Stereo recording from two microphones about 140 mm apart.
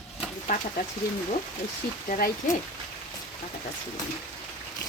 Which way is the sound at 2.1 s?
65° left (ahead or behind).